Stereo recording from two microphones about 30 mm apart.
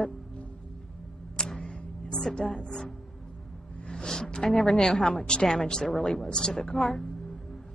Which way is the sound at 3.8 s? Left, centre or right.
Left.